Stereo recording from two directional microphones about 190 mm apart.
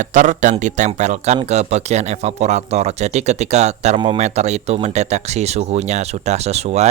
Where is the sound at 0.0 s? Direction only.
40° right (ahead or behind).